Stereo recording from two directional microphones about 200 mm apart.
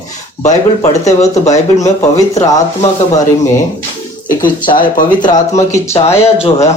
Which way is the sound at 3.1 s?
15° left (ahead or behind).